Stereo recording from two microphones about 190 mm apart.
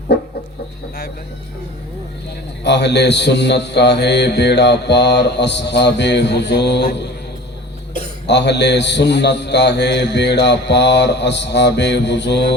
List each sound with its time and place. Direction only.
2.6 s a man's voice: 65° left (ahead or behind)
8.3 s a man's voice: 65° left (ahead or behind)